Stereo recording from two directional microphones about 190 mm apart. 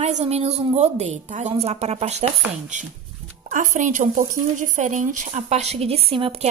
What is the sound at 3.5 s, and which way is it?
A woman's voice, 40° right (ahead or behind).